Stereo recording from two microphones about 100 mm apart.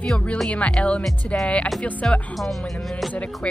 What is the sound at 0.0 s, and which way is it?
Speech, 10° left (ahead or behind).